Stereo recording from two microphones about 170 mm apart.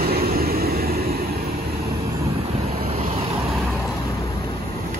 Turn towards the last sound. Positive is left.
turn(degrees=-35)  # may be behind; listen again after turning